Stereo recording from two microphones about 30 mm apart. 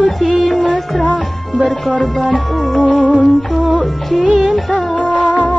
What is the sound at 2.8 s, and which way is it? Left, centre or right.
Music, left.